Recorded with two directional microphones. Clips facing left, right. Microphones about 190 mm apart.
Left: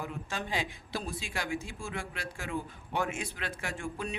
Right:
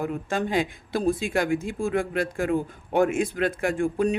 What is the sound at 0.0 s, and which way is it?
Speech, 50° right (ahead or behind).